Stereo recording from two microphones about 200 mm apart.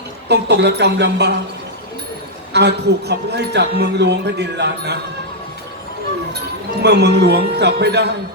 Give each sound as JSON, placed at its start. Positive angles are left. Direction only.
{"t": 0.3, "sound": "a man's voice", "side_deg": -60}
{"t": 2.5, "sound": "a man's voice", "side_deg": -55}
{"t": 6.8, "sound": "a man's voice", "side_deg": -55}